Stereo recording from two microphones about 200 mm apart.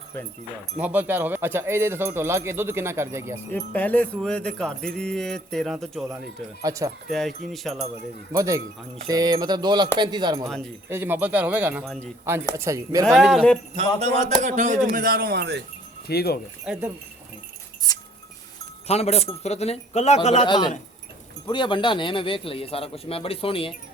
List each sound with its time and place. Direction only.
0.8 s speech: 5° right (ahead or behind)
3.5 s speech: 10° left (ahead or behind)
6.6 s speech: 15° right (ahead or behind)
7.1 s speech: centre (ahead or behind)
8.3 s speech: 15° right (ahead or behind)
10.4 s speech: 5° left (ahead or behind)
10.8 s speech: 10° right (ahead or behind)
13.1 s speech: centre (ahead or behind)
13.7 s speech: 35° right (ahead or behind); by 15.6 s 60° right (ahead or behind)
16.0 s speech: 50° left (ahead or behind)
16.7 s speech: 5° right (ahead or behind)
17.9 s speech: 20° left (ahead or behind)
18.9 s speech: 30° left (ahead or behind)